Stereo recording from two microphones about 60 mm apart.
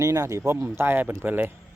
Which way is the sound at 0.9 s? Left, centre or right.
Right.